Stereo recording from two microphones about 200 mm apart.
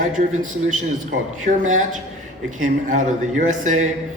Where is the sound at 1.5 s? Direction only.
40° right (ahead or behind).